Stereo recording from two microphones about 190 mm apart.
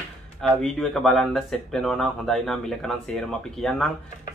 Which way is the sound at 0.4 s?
Centre (ahead or behind).